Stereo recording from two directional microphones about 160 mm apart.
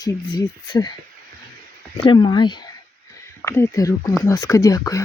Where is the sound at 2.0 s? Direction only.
30° left (ahead or behind).